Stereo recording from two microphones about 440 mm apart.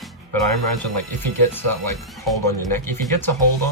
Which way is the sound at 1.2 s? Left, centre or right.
Centre.